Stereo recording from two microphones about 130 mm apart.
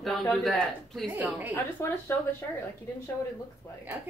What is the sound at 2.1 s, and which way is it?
Speech, 15° left (ahead or behind).